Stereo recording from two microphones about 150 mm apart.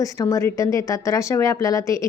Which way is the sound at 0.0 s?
20° left (ahead or behind).